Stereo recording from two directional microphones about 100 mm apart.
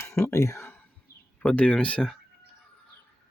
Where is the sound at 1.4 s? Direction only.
10° left (ahead or behind).